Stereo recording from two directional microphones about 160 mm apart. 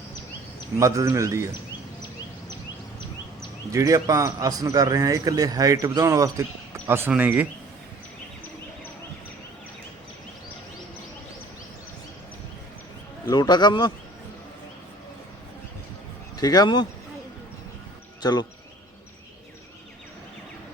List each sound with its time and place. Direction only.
0.8 s a man's voice: 20° right (ahead or behind)
3.7 s a man's voice: 20° right (ahead or behind)
13.2 s speech: 25° left (ahead or behind)
16.4 s speech: 25° left (ahead or behind)
18.2 s speech: 25° left (ahead or behind)